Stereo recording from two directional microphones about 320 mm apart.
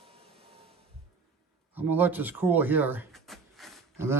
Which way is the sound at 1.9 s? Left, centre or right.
Centre.